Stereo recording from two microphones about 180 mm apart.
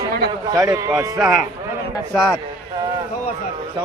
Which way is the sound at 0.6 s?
5° right (ahead or behind).